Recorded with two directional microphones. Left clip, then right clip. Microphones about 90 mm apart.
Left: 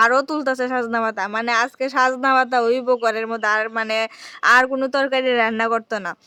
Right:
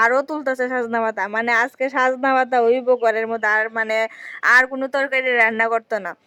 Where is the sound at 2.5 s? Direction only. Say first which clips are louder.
Right 2 dB; 40° right (ahead or behind).